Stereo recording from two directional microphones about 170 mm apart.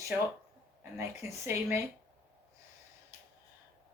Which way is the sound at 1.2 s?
15° right (ahead or behind).